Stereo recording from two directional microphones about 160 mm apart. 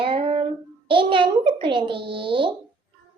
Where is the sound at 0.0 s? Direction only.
35° right (ahead or behind).